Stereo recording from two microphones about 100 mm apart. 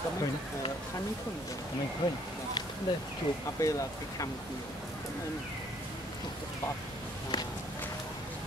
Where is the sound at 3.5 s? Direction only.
35° left (ahead or behind).